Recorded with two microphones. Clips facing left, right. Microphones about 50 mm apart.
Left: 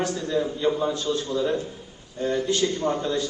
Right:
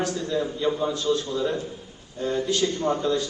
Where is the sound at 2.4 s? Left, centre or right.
Left.